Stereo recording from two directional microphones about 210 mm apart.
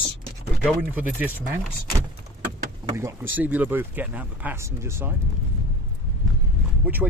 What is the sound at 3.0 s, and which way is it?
Speech, 10° right (ahead or behind).